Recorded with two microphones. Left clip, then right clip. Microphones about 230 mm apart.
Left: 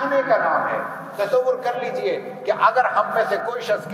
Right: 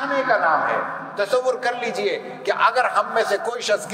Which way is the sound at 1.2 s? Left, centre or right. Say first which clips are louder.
Left 1 dB; right.